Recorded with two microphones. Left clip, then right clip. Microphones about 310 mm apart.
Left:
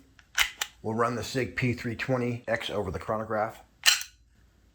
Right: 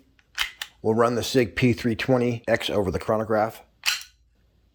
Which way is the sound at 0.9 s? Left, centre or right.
Right.